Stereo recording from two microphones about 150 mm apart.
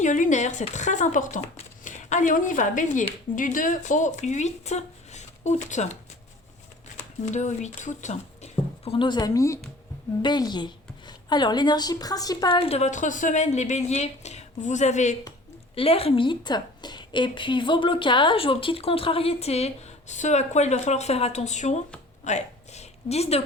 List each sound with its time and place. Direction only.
0.0 s speech: 55° left (ahead or behind)
7.3 s a woman's voice: 50° left (ahead or behind); by 12.5 s 25° left (ahead or behind)
12.5 s speech: 40° left (ahead or behind)
15.7 s a woman's voice: 40° left (ahead or behind)
22.2 s a sound: 50° left (ahead or behind)